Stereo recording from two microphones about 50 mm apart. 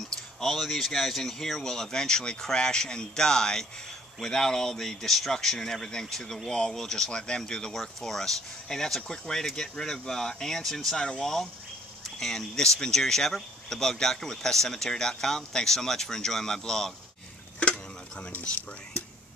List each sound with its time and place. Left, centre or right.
0.1 s speech: centre
17.6 s tick-tock: left